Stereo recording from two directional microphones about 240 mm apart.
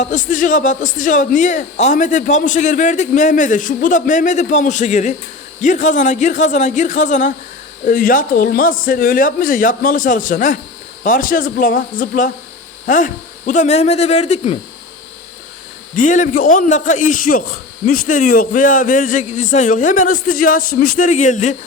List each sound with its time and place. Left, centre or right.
0.0 s a man's voice: left
16.0 s a man's voice: left